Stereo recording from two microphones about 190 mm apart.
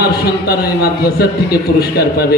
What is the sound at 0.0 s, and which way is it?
A man's voice, 55° left (ahead or behind).